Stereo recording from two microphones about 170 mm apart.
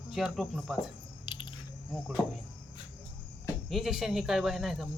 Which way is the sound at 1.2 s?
30° left (ahead or behind).